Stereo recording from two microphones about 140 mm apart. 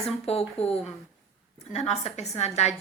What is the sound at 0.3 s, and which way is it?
Speech, 45° left (ahead or behind).